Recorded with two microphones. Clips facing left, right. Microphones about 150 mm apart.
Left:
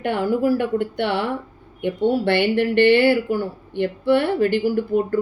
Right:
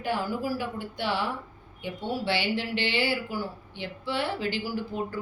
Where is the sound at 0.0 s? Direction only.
60° left (ahead or behind).